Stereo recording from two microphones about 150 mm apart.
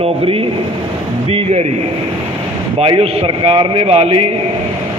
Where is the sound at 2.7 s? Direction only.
40° right (ahead or behind).